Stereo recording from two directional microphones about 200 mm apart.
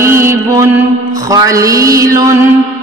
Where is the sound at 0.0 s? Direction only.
15° right (ahead or behind).